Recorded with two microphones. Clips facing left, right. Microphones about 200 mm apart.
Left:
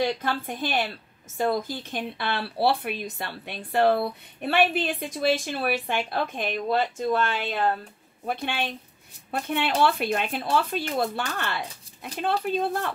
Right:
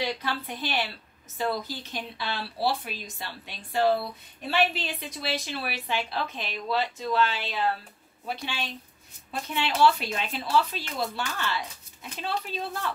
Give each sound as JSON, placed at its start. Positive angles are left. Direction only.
{"t": 0.0, "sound": "speech", "side_deg": 50}